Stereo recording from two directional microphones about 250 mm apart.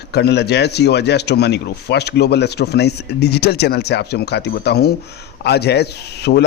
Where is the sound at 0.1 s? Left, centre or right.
Left.